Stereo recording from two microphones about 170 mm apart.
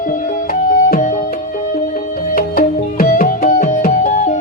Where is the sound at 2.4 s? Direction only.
60° left (ahead or behind).